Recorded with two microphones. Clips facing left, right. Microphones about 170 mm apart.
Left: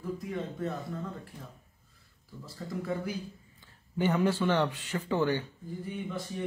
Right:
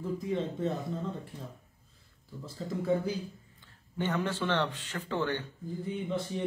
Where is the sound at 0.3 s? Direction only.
25° right (ahead or behind).